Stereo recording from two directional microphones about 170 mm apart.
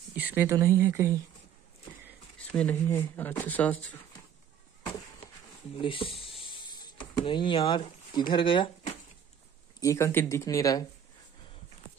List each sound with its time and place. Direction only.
0.1 s a sound: 10° right (ahead or behind)
0.7 s speech: 15° right (ahead or behind)
2.3 s speech: 5° left (ahead or behind)
5.8 s a sound: 30° left (ahead or behind)
8.3 s speech: 30° left (ahead or behind)
9.8 s speech: 15° left (ahead or behind)